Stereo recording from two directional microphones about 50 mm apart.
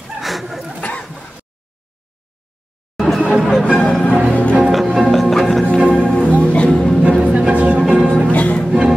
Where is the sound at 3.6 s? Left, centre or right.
Centre.